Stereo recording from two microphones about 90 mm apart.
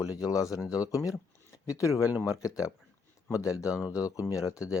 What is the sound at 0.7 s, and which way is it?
Speech, 40° left (ahead or behind).